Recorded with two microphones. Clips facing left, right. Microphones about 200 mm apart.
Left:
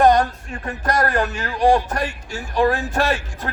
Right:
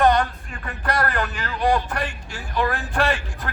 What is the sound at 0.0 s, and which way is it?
Music, 45° left (ahead or behind).